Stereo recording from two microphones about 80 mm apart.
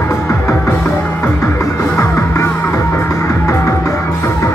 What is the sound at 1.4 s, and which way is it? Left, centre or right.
Music, left.